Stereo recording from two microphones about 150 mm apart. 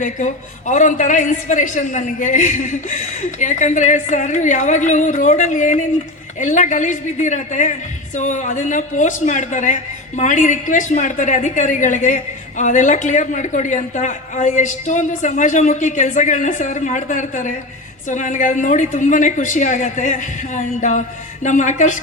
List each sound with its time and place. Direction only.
0.7 s a man's voice: 55° left (ahead or behind)